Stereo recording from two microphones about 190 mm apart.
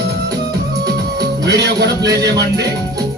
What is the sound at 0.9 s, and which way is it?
Music, 60° right (ahead or behind).